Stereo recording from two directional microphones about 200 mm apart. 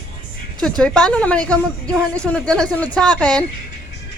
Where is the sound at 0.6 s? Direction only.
5° left (ahead or behind).